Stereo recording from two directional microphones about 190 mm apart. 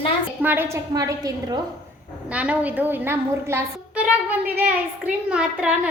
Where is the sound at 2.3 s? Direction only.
5° right (ahead or behind).